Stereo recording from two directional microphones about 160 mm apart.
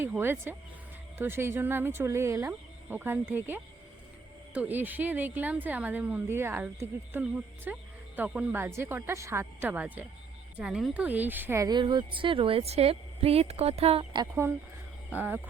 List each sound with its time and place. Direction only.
0.0 s a woman's voice: 15° right (ahead or behind); by 14.3 s 35° right (ahead or behind)